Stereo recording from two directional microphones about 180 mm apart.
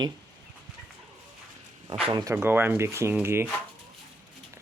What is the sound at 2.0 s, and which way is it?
Speech, 25° right (ahead or behind).